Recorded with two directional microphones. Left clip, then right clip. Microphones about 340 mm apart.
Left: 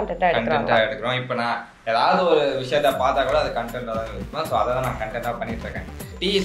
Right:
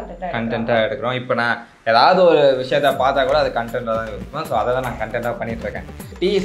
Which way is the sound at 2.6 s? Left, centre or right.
Right.